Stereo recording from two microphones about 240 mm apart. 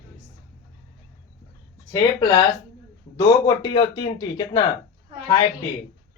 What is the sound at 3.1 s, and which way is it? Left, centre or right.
Speech, centre.